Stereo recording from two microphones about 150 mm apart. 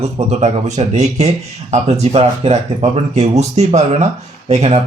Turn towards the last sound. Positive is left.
turn(degrees=-50)  # may be behind; listen again after turning